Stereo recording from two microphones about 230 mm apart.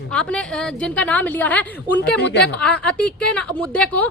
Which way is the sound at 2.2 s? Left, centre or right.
Left.